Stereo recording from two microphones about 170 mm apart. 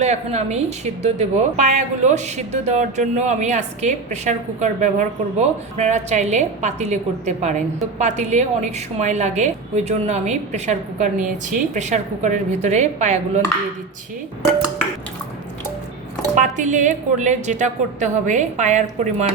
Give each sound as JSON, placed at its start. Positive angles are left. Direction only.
{"t": 0.0, "sound": "a woman's voice", "side_deg": -40}
{"t": 16.3, "sound": "a woman's voice", "side_deg": -50}